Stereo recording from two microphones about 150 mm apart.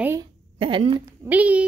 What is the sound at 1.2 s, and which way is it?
Speech, 10° right (ahead or behind).